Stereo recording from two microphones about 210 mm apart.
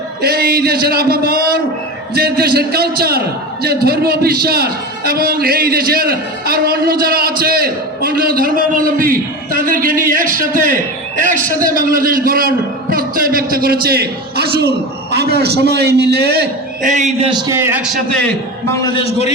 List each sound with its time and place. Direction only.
0.2 s a man's voice: 50° right (ahead or behind)
17.3 s a man's voice: 15° right (ahead or behind)
18.8 s a man's voice: 25° left (ahead or behind)